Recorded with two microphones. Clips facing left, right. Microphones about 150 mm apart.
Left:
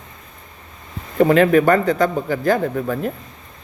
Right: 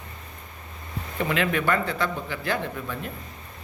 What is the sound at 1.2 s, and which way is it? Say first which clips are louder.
A man's voice: left 12 dB; 45° left (ahead or behind).